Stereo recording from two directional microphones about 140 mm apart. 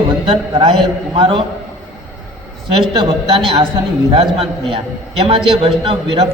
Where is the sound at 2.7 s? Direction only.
40° right (ahead or behind).